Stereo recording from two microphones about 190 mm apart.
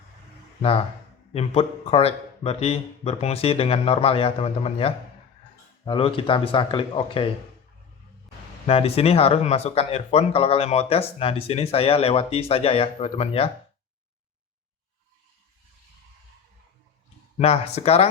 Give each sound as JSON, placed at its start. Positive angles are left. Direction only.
{"t": 1.3, "sound": "speech", "side_deg": 30}
{"t": 8.6, "sound": "speech", "side_deg": 30}
{"t": 17.4, "sound": "speech", "side_deg": 30}